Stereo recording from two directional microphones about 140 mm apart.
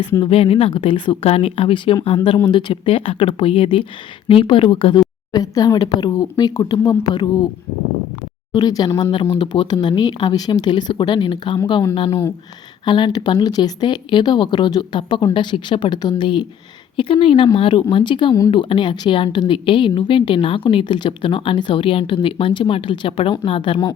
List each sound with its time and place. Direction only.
0.2 s a woman's voice: 40° left (ahead or behind)
8.5 s speech: 30° left (ahead or behind)
8.9 s speech: 20° left (ahead or behind)
9.3 s a woman's voice: 35° left (ahead or behind)
11.9 s speech: 45° left (ahead or behind)
12.8 s a woman's voice: 35° left (ahead or behind)